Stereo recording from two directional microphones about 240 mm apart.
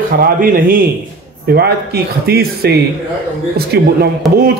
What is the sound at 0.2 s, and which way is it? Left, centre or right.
Speech, right.